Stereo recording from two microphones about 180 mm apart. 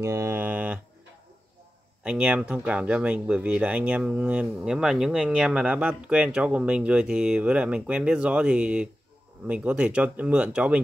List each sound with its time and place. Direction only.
0.0 s mantra: 15° right (ahead or behind)
2.0 s speech: 5° right (ahead or behind)